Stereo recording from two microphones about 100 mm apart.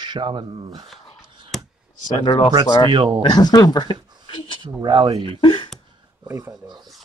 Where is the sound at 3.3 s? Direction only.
40° left (ahead or behind).